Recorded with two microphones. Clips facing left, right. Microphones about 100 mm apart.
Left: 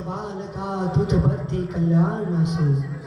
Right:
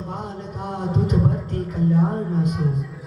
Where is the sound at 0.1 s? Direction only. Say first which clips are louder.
Left 1 dB; 45° right (ahead or behind).